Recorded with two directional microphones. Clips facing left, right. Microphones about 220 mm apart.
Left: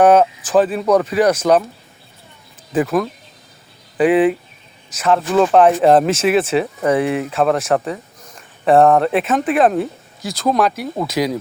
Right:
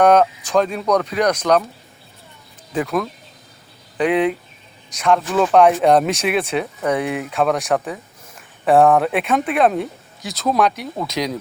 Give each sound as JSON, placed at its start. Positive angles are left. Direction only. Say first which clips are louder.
{"t": 0.0, "sound": "speech", "louder": "left 2 dB", "side_deg": 5}
{"t": 2.7, "sound": "speech", "louder": "left 4 dB", "side_deg": 5}